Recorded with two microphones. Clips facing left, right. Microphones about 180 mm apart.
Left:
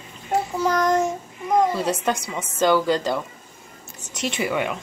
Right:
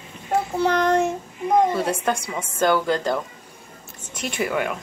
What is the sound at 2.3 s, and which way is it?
Speech, centre (ahead or behind).